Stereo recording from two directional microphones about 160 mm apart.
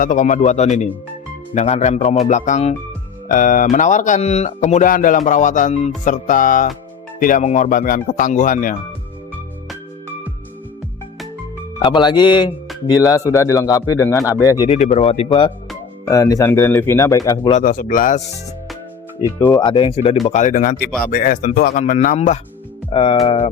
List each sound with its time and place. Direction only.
0.0 s speech: 55° left (ahead or behind)
3.3 s speech: 60° left (ahead or behind)
11.8 s speech: 30° left (ahead or behind)
14.7 s speech: 40° left (ahead or behind)
15.3 s speech: 30° left (ahead or behind)
17.5 s speech: 55° left (ahead or behind)
19.5 s speech: 25° left (ahead or behind)
20.3 s speech: 55° left (ahead or behind)
22.9 s speech: 35° left (ahead or behind)